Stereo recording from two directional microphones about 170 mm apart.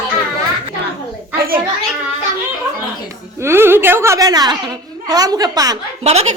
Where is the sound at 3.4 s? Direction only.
15° right (ahead or behind).